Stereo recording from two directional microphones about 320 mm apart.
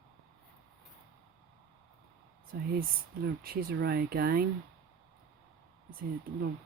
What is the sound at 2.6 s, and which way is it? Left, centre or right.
Speech, right.